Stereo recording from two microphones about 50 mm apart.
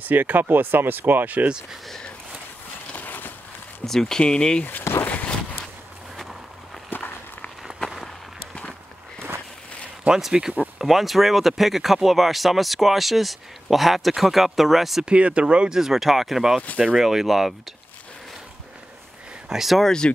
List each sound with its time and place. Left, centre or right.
0.0 s speech: right
2.9 s a sound: left
3.8 s speech: centre
5.0 s a sound: left
6.1 s vehicle: centre
6.9 s walk: left
10.2 s speech: centre
15.0 s speech: right
15.7 s speech: centre
19.5 s speech: centre
19.8 s speech: centre